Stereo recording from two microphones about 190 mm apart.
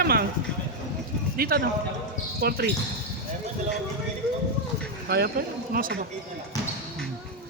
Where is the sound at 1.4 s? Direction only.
50° right (ahead or behind).